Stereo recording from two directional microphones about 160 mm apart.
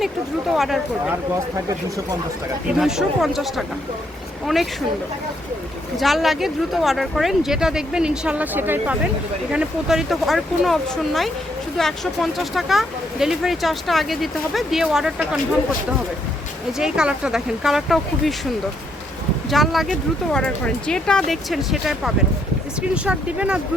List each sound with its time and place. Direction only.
0.5 s speech: centre (ahead or behind)
2.7 s speech: 5° right (ahead or behind)
6.0 s speech: centre (ahead or behind)
16.7 s speech: 5° right (ahead or behind)
19.5 s speech: centre (ahead or behind)